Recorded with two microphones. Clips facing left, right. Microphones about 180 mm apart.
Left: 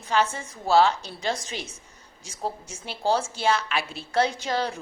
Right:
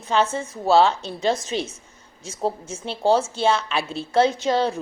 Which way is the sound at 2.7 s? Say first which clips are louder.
Right 5 dB; 25° right (ahead or behind).